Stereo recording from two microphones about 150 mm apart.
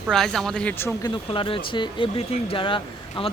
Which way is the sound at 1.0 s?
35° left (ahead or behind).